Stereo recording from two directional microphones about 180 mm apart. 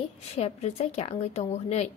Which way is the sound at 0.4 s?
35° left (ahead or behind).